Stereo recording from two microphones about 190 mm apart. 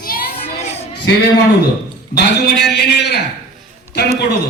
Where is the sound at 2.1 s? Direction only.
60° left (ahead or behind).